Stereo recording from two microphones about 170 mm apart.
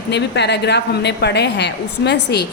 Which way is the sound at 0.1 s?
85° left.